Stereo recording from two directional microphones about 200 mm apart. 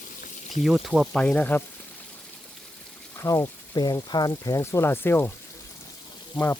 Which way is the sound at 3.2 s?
15° left (ahead or behind).